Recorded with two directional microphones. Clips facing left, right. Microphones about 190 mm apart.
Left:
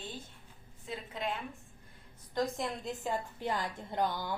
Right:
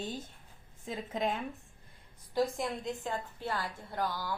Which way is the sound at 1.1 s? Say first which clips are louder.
Right 5 dB; 45° right (ahead or behind).